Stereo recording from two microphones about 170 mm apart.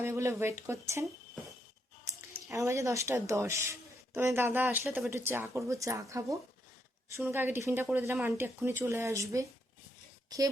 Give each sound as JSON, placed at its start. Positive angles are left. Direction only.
{"t": 0.0, "sound": "speech", "side_deg": -15}
{"t": 2.0, "sound": "speech", "side_deg": -20}